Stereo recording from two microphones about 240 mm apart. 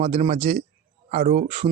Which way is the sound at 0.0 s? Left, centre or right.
Right.